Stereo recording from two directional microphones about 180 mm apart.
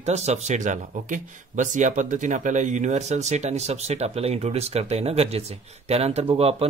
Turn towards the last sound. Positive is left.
turn(degrees=-35)  # may be behind; listen again after turning